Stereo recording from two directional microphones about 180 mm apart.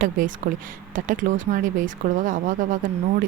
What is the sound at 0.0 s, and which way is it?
A woman's voice, 50° right (ahead or behind).